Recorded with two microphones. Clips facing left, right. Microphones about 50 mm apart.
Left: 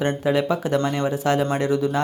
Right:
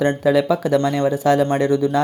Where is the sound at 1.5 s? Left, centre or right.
Right.